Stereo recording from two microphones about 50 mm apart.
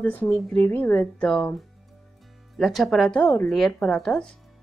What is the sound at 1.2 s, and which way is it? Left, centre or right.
Speech, centre.